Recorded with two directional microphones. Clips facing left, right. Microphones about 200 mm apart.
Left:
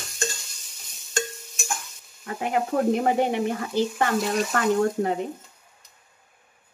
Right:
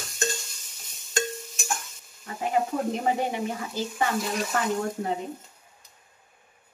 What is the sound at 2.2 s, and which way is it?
A woman's voice, 65° left (ahead or behind).